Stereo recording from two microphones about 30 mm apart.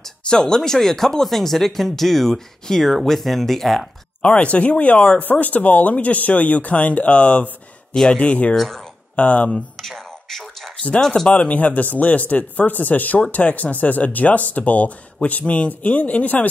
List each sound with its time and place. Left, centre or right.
0.2 s a sound: left
0.7 s speech: centre
4.2 s speech: left
5.2 s speech: left
7.9 s speech: left
9.1 s speech: left
9.8 s a sound: centre
11.0 s speech: centre
11.3 s speech: left
13.3 s speech: left